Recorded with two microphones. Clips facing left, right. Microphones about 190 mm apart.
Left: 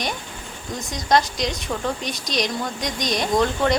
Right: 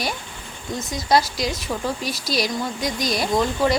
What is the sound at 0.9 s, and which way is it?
A woman's voice, 5° right (ahead or behind).